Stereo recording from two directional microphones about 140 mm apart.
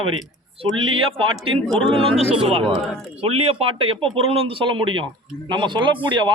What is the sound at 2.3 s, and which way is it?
Speech, 40° right (ahead or behind).